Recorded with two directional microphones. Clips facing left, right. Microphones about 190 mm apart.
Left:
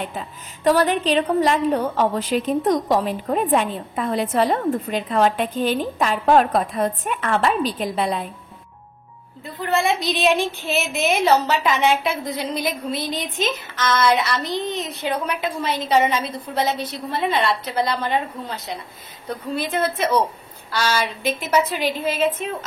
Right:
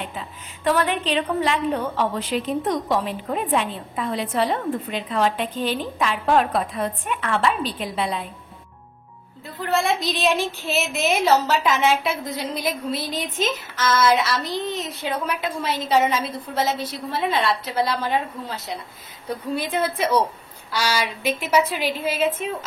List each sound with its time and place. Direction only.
0.7 s a woman's voice: 40° left (ahead or behind)
9.6 s a woman's voice: centre (ahead or behind)